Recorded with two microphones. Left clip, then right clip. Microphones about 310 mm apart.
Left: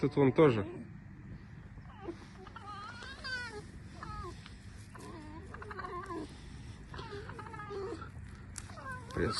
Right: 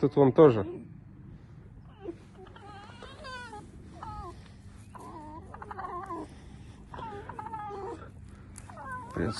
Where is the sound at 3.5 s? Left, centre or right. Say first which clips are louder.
Right 1 dB; right.